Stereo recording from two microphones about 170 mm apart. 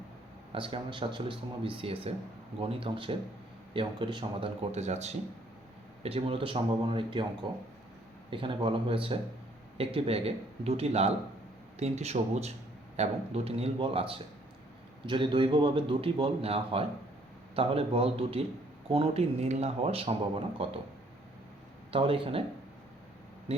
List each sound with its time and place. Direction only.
0.5 s speech: 30° right (ahead or behind)
4.7 s speech: 40° right (ahead or behind)
8.3 s speech: 30° right (ahead or behind)
21.9 s speech: 30° right (ahead or behind)